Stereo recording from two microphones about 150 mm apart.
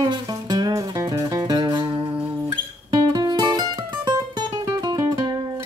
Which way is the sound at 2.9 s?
25° right (ahead or behind).